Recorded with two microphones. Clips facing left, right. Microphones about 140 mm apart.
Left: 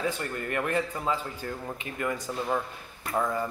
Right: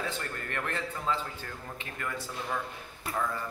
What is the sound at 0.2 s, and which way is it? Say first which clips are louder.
A man's voice: left 6 dB; 15° left (ahead or behind).